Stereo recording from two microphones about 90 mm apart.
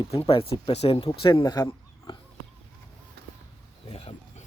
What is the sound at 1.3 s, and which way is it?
Speech, 40° left (ahead or behind).